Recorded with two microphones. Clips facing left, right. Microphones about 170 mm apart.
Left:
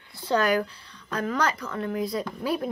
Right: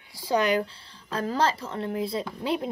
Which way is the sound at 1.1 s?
30° right (ahead or behind).